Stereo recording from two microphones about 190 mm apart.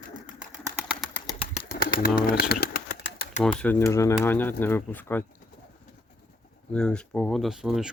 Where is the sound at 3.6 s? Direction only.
10° left (ahead or behind).